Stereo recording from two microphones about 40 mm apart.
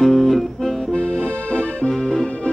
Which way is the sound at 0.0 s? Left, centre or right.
Centre.